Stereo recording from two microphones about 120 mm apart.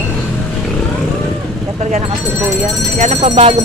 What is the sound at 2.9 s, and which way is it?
Speech, 65° right (ahead or behind).